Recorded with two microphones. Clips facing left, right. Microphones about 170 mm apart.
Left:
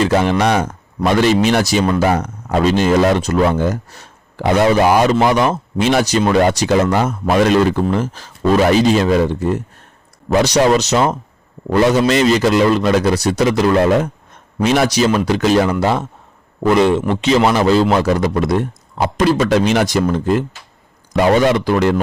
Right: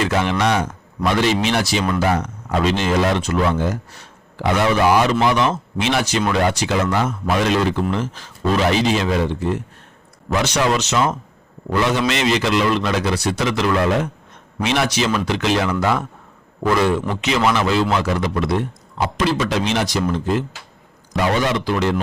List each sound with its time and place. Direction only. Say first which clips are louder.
0.0 s a man's voice: left 5 dB; 35° left (ahead or behind)
15.8 s speech: left 3 dB; 30° left (ahead or behind)
17.2 s speech: left 5 dB; 35° left (ahead or behind); by 22.0 s 50° left (ahead or behind)